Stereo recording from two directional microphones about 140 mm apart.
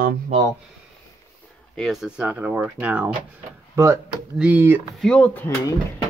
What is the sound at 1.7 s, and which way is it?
Speech, centre (ahead or behind).